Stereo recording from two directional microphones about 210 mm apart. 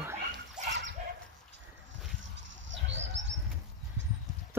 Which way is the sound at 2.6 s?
60° right (ahead or behind).